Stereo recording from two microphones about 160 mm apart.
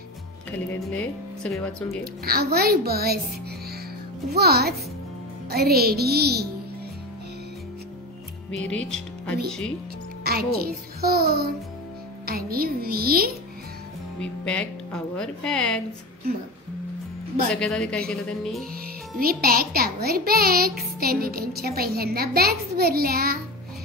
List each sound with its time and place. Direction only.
0.5 s speech: 10° left (ahead or behind)
2.2 s a child's voice: 75° right (ahead or behind)
4.3 s speech: 80° right
8.5 s speech: 5° left (ahead or behind)
11.0 s a child's voice: 70° right (ahead or behind)
14.2 s speech: 5° left (ahead or behind)
17.6 s speech: 5° left (ahead or behind)
19.1 s a child's voice: 65° right (ahead or behind)